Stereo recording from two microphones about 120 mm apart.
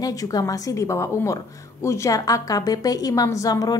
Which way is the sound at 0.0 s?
30° left (ahead or behind).